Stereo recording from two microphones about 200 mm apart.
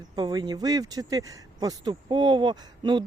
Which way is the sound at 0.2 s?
20° right (ahead or behind).